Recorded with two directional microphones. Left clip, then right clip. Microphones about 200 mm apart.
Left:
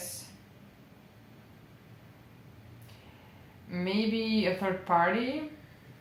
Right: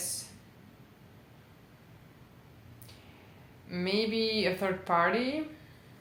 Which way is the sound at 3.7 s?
25° right (ahead or behind).